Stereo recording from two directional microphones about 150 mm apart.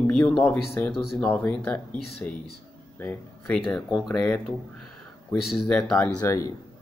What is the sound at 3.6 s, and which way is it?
Speech, centre (ahead or behind).